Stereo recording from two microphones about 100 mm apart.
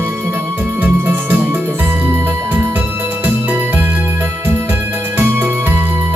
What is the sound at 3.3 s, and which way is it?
Music, 20° right (ahead or behind).